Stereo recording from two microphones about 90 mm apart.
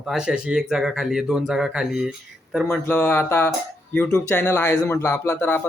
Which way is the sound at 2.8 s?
20° left (ahead or behind).